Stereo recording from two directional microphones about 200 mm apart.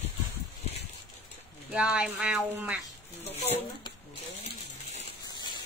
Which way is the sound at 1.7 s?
5° right (ahead or behind).